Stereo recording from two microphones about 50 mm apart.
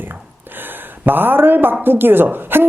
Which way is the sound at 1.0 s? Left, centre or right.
Right.